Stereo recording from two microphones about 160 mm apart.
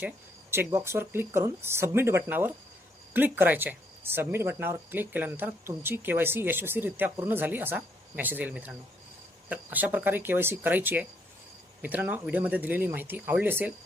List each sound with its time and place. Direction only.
0.5 s speech: 15° right (ahead or behind)